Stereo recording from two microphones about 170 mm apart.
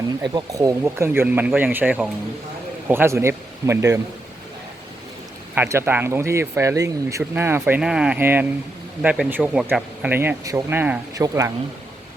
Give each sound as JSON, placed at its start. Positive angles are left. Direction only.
{"t": 0.2, "sound": "speech", "side_deg": -25}
{"t": 5.5, "sound": "speech", "side_deg": -15}